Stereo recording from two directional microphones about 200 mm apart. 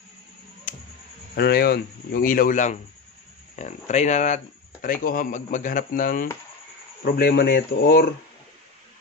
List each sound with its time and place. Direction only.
1.3 s speech: 50° left (ahead or behind)